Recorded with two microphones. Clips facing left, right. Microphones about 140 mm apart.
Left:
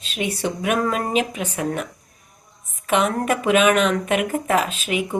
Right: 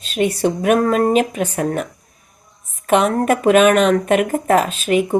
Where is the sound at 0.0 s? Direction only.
45° right (ahead or behind).